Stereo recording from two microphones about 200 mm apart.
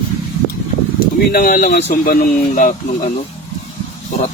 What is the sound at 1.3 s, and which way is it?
Speech, 45° left (ahead or behind).